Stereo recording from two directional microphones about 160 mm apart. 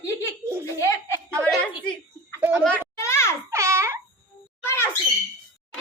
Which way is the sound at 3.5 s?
20° right (ahead or behind).